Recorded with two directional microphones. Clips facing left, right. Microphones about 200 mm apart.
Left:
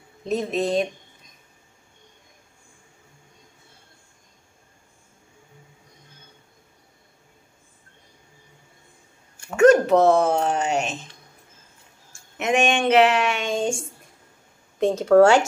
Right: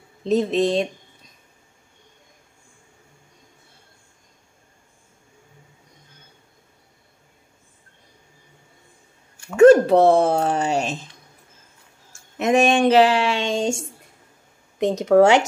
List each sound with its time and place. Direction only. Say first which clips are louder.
0.2 s speech: right 5 dB; 30° right (ahead or behind)
9.6 s a sound: right 3 dB; 30° right (ahead or behind)
12.4 s speech: right 4 dB; 35° right (ahead or behind)
14.8 s speech: even; 20° right (ahead or behind)